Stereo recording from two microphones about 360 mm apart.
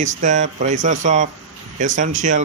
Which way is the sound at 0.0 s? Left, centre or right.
Right.